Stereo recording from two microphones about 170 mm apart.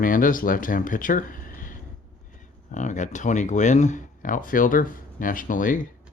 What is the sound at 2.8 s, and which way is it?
Speech, 45° left (ahead or behind).